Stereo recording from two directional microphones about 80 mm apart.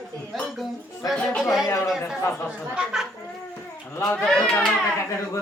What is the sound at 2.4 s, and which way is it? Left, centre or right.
Speech, centre.